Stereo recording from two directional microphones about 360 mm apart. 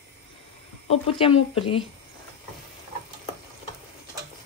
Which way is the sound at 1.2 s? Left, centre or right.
Centre.